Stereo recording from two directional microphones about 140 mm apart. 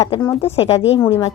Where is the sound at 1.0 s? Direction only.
35° left (ahead or behind).